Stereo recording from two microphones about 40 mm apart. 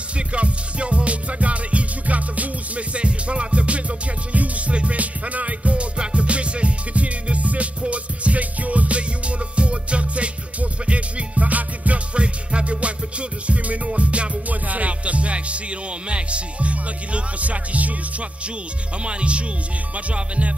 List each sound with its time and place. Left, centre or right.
0.3 s music: right
19.0 s speech: right
20.1 s music: right